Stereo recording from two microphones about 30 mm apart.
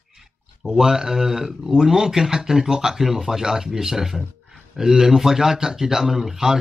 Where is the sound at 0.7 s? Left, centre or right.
Centre.